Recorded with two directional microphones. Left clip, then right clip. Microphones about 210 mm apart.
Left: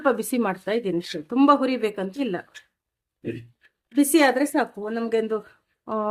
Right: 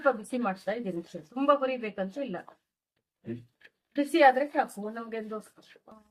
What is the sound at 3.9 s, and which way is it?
Speech, 55° left (ahead or behind).